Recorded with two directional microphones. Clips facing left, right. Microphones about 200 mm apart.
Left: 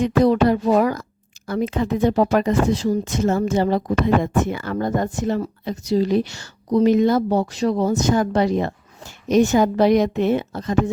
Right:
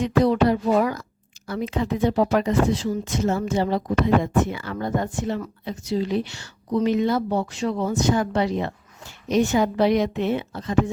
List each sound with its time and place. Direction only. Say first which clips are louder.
0.0 s speech: left 3 dB; 45° left (ahead or behind)